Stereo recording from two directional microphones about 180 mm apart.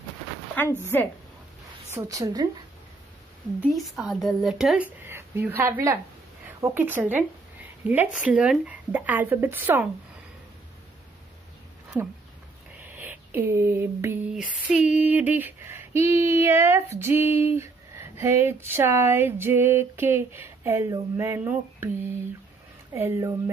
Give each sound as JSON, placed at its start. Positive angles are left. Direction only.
{"t": 0.6, "sound": "speech", "side_deg": 10}
{"t": 2.0, "sound": "a woman's voice", "side_deg": -20}
{"t": 3.6, "sound": "speech", "side_deg": 0}
{"t": 5.0, "sound": "a woman's voice", "side_deg": -10}
{"t": 12.9, "sound": "a sound", "side_deg": -10}
{"t": 15.0, "sound": "speech", "side_deg": -10}
{"t": 22.9, "sound": "speech", "side_deg": -15}